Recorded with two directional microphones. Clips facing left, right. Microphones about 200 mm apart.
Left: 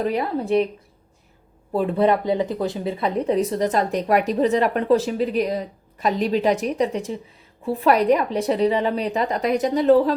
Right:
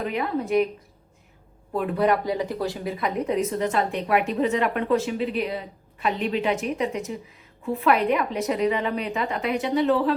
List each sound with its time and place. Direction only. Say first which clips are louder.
0.0 s speech: left 3 dB; 35° left (ahead or behind)
1.7 s speech: left 3 dB; 30° left (ahead or behind)